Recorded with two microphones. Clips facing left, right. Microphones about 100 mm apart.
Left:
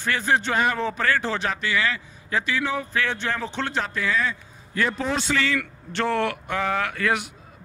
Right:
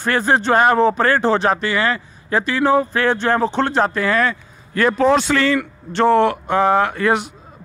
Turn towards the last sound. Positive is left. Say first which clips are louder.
# right 7 dB
turn(degrees=-30)  # may be behind; listen again after turning